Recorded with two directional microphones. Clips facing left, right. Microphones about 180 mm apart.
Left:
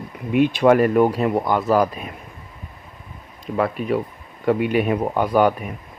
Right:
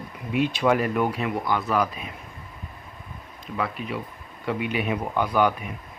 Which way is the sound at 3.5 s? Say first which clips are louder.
Left 8 dB; 45° left (ahead or behind).